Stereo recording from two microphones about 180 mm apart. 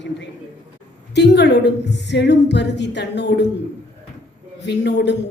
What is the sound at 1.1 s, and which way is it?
A woman's voice, 70° left (ahead or behind).